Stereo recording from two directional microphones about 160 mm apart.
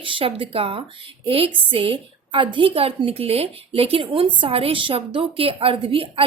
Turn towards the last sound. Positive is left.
turn(degrees=-35)  # may be behind; listen again after turning